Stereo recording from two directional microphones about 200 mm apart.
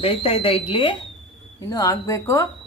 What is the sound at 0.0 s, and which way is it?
Speech, 30° left (ahead or behind).